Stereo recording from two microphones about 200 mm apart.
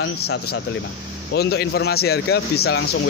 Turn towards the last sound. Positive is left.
turn(degrees=55)  # may be behind; listen again after turning